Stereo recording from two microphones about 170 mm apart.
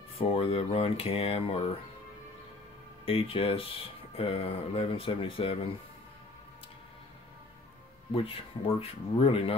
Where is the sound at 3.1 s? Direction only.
35° left (ahead or behind).